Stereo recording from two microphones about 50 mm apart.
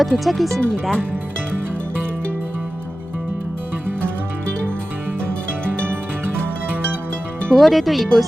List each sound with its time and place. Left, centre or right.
0.0 s speech: centre
5.8 s music: right
7.5 s speech: centre